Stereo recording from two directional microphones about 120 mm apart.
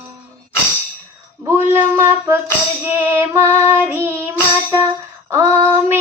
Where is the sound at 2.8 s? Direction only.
15° right (ahead or behind).